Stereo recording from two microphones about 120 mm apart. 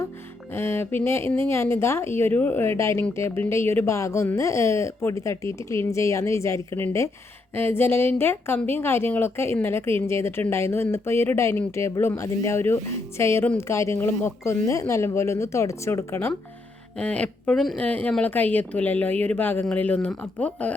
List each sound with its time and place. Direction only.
0.5 s a woman's voice: 20° left (ahead or behind)
17.0 s speech: 10° left (ahead or behind)